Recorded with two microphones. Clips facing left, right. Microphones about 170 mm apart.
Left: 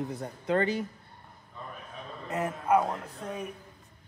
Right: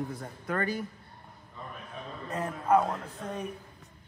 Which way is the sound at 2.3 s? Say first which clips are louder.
Even; 20° left (ahead or behind).